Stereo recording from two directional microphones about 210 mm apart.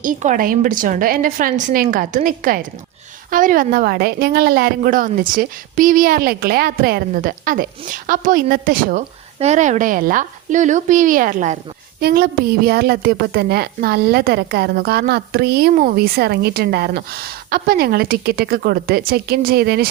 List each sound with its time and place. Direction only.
0.0 s a woman's voice: 40° right (ahead or behind)